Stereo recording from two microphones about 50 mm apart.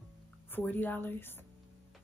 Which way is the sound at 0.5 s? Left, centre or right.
Left.